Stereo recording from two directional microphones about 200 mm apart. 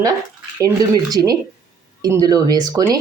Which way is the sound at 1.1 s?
20° right (ahead or behind).